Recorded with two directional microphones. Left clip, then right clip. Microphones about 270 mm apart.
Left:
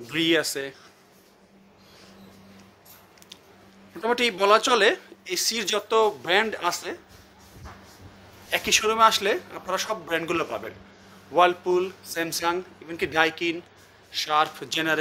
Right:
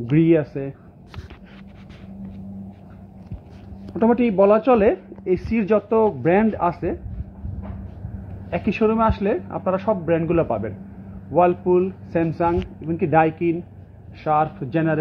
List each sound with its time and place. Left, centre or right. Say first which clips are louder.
0.1 s speech: right 5 dB; centre
4.1 s speech: right 3 dB; centre
8.5 s speech: right 1 dB; centre